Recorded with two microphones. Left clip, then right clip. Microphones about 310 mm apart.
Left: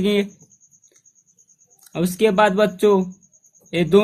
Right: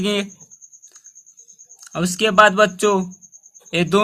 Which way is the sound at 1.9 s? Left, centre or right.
Right.